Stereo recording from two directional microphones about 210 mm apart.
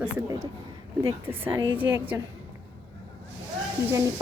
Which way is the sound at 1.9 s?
5° right (ahead or behind).